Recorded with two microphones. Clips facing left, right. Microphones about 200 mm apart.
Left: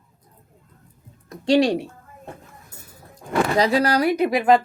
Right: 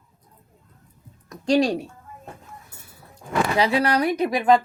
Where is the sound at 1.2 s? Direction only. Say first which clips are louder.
Left 2 dB; 25° left (ahead or behind).